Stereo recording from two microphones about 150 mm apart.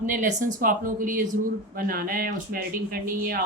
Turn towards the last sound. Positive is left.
turn(degrees=-75)  # may be behind; listen again after turning